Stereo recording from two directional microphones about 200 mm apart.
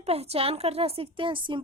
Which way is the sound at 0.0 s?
30° right (ahead or behind).